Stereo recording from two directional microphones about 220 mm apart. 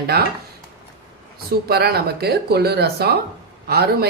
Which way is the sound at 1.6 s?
45° right (ahead or behind).